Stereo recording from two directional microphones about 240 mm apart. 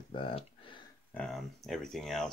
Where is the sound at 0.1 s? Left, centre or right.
Left.